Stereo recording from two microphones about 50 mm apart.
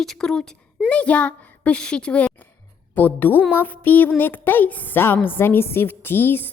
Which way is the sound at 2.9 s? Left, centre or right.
Left.